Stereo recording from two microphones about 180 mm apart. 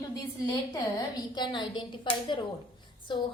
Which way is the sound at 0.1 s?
20° left (ahead or behind).